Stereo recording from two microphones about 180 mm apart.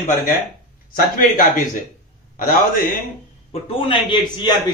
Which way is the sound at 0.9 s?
50° left (ahead or behind).